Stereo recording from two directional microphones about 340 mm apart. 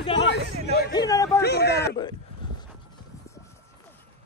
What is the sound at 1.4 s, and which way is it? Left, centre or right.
Speech, left.